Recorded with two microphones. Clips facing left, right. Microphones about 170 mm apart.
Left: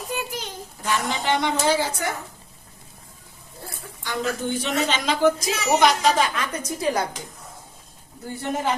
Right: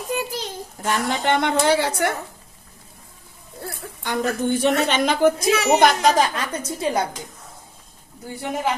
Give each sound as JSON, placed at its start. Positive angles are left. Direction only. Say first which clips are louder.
{"t": 0.1, "sound": "a sound", "louder": "right 4 dB", "side_deg": -35}
{"t": 0.9, "sound": "a woman's voice", "louder": "right 3 dB", "side_deg": -55}
{"t": 4.0, "sound": "a woman's voice", "louder": "right 4 dB", "side_deg": -55}